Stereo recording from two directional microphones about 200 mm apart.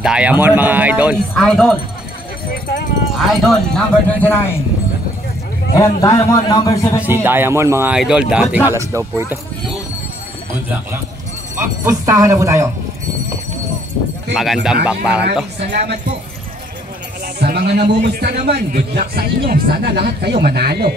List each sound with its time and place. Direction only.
0.0 s speech: 5° right (ahead or behind)
3.2 s speech: centre (ahead or behind)
5.8 s a man's voice: 15° left (ahead or behind)
7.0 s speech: 10° right (ahead or behind)
11.5 s speech: 15° right (ahead or behind)
14.3 s speech: centre (ahead or behind)
15.7 s speech: 55° right (ahead or behind)
17.4 s a man's voice: 55° right (ahead or behind)